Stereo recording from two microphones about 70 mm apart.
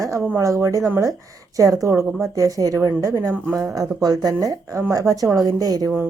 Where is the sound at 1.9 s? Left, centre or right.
Right.